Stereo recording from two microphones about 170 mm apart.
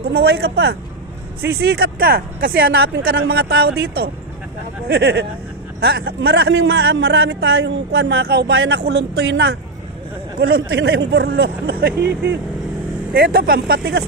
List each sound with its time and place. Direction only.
0.1 s a man's voice: 70° right (ahead or behind)
13.1 s speech: 60° right (ahead or behind)